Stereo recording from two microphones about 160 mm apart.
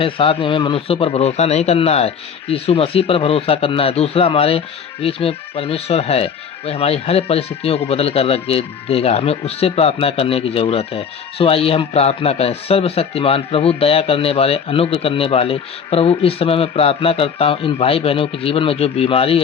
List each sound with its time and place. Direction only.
0.0 s speech: 35° left (ahead or behind)